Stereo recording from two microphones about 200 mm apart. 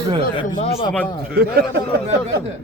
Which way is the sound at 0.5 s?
30° left (ahead or behind).